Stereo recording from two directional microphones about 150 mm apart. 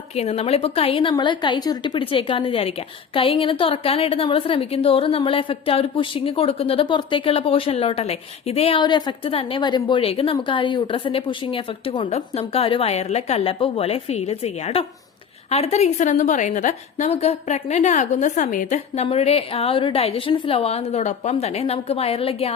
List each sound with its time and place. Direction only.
0.2 s a woman's voice: 45° left (ahead or behind)
17.1 s a woman's voice: 45° left (ahead or behind)
19.0 s a woman's voice: 40° left (ahead or behind)